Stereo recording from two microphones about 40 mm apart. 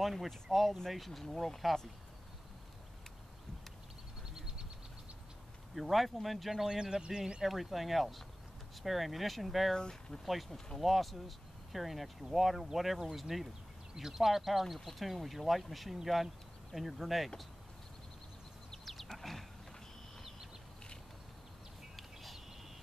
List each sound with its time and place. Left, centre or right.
0.0 s speech: centre
4.3 s a sound: centre
5.8 s speech: centre
6.6 s speech: centre
7.4 s speech: centre
9.8 s speech: centre
10.2 s speech: centre
18.7 s a sound: centre
21.9 s bird: centre